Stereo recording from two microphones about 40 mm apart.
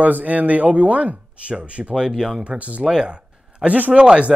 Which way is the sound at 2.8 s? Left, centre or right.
Centre.